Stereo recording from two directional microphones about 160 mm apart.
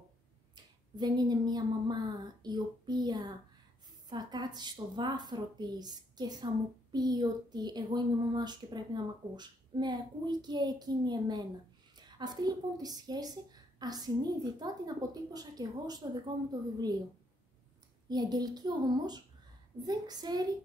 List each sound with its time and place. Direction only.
0.9 s speech: 25° right (ahead or behind)
18.0 s speech: 25° right (ahead or behind)